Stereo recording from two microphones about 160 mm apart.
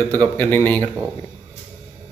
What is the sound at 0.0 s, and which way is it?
Speech, 25° right (ahead or behind).